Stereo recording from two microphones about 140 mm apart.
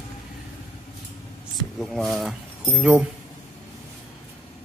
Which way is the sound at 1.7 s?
Centre (ahead or behind).